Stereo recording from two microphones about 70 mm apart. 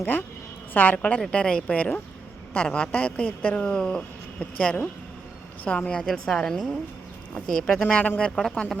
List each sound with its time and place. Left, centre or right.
0.0 s a woman's voice: left; by 7.8 s centre
7.8 s speech: left